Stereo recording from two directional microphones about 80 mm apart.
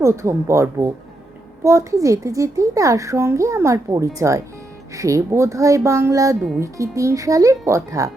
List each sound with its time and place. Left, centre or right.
0.0 s a woman's voice: right